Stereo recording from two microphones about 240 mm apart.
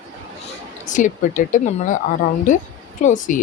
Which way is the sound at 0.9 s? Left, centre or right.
Left.